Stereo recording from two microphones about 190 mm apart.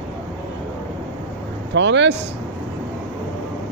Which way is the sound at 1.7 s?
70° right (ahead or behind).